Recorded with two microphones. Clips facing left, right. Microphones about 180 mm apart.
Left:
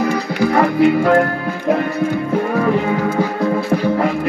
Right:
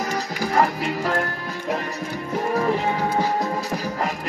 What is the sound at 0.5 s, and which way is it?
Music, 65° left (ahead or behind).